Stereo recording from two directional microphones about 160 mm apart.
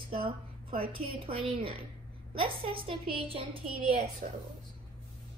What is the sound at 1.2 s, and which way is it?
A woman's voice, 35° right (ahead or behind).